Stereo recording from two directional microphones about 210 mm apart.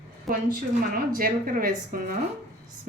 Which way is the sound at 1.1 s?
40° right (ahead or behind).